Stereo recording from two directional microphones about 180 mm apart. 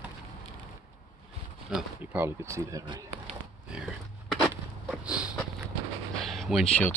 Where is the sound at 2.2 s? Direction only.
15° right (ahead or behind).